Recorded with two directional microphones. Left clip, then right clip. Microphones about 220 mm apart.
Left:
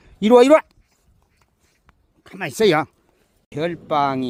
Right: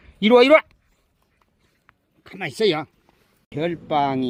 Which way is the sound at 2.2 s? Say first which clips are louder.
Left 2 dB; 15° left (ahead or behind).